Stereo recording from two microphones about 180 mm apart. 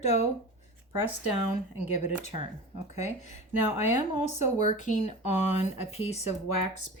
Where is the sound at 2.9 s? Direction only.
40° left (ahead or behind).